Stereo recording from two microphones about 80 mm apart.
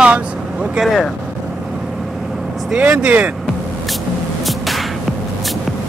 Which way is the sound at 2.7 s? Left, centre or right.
Centre.